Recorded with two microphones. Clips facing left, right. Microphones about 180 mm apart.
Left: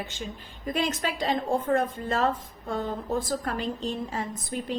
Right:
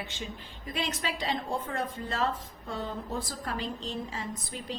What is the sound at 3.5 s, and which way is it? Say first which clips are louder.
A woman's voice: left 5 dB; 50° left (ahead or behind).